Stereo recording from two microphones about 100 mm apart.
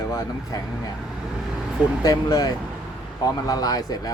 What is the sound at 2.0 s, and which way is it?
Speech, 40° left (ahead or behind).